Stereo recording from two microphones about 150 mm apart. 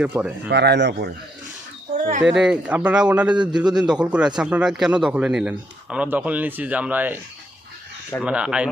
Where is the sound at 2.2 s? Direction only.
5° right (ahead or behind).